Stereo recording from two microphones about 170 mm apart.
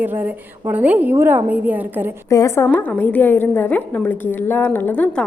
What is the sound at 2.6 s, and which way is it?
A woman's voice, 5° left (ahead or behind).